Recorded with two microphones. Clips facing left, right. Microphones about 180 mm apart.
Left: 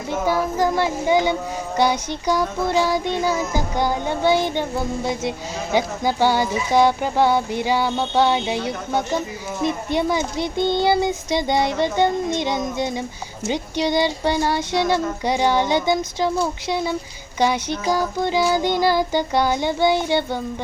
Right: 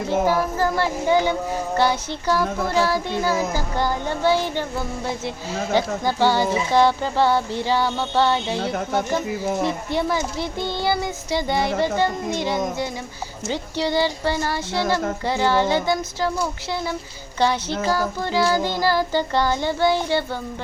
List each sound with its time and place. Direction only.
0.5 s speech: 15° left (ahead or behind)
5.7 s speech: 15° left (ahead or behind)